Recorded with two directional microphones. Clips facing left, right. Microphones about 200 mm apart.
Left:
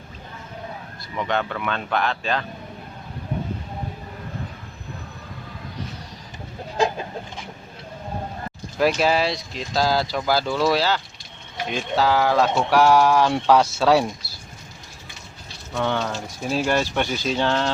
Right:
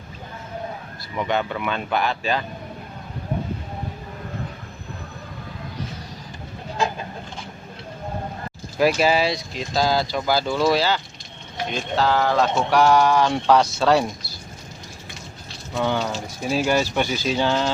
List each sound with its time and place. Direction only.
1.1 s speech: 5° right (ahead or behind)
8.8 s speech: 5° right (ahead or behind)
15.7 s speech: 5° right (ahead or behind)